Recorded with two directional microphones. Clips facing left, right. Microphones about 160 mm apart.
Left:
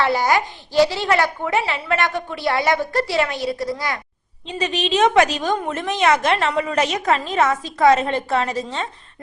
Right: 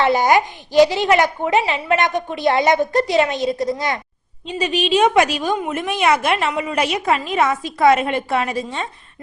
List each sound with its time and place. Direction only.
0.0 s a woman's voice: 20° right (ahead or behind)
4.5 s a woman's voice: 10° right (ahead or behind)